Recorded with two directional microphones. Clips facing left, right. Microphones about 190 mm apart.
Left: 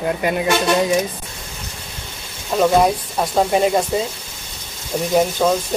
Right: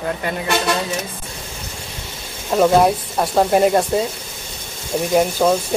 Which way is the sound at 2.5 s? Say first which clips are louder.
Right 1 dB; 5° right (ahead or behind).